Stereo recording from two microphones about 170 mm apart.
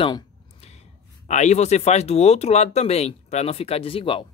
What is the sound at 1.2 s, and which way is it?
Speech, 45° left (ahead or behind).